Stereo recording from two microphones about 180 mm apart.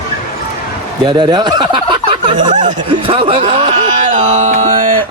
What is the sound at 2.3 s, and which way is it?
Speech, 45° right (ahead or behind).